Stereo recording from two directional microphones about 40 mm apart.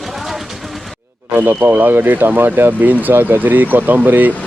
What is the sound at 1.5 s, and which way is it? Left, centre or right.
Speech, right.